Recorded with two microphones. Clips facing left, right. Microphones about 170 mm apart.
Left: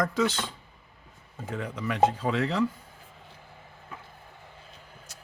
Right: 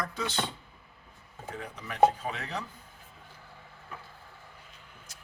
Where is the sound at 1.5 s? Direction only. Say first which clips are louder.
Left 9 dB; 90° left.